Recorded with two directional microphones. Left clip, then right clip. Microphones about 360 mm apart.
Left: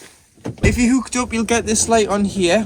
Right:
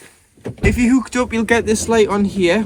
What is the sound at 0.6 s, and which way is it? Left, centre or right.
Speech, centre.